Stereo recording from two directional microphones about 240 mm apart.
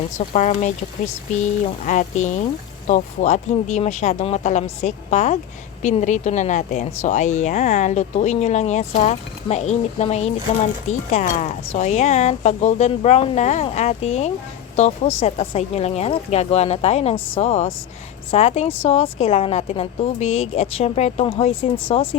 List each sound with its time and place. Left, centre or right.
0.3 s a woman's voice: left
1.8 s a woman's voice: left